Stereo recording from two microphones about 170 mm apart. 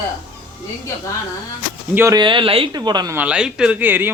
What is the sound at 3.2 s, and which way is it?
Speech, 5° right (ahead or behind).